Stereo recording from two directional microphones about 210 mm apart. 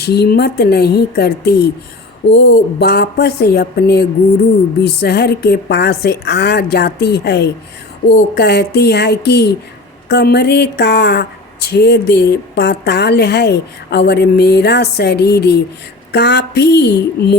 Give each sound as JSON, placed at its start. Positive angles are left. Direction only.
{"t": 0.0, "sound": "a woman's voice", "side_deg": 50}